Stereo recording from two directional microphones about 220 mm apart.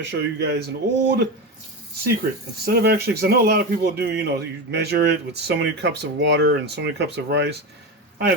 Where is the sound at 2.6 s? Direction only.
45° right (ahead or behind).